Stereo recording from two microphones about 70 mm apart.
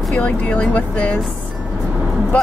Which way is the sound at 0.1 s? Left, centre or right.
Centre.